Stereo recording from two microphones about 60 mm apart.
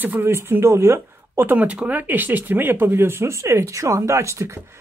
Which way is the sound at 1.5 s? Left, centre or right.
Right.